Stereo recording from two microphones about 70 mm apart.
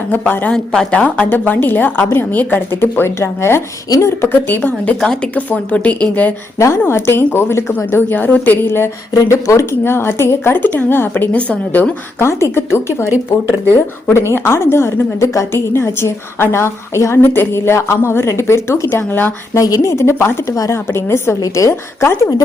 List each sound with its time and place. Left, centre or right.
0.1 s a woman's voice: left
0.5 s a woman's voice: centre; by 4.7 s left
4.9 s speech: centre
5.3 s a woman's voice: left
6.6 s a woman's voice: left
9.1 s a woman's voice: left
12.2 s a woman's voice: left
17.2 s a woman's voice: left
19.5 s a woman's voice: left
21.4 s speech: left
21.7 s a woman's voice: left